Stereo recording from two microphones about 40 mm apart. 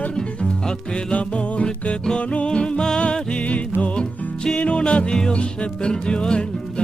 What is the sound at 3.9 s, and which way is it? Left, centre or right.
Music, centre.